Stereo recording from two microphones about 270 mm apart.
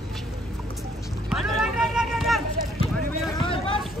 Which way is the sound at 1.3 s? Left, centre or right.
Centre.